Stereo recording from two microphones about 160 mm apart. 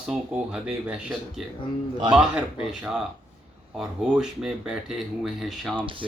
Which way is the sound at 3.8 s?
5° right (ahead or behind).